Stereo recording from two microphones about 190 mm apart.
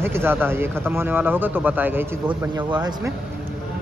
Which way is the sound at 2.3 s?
20° right (ahead or behind).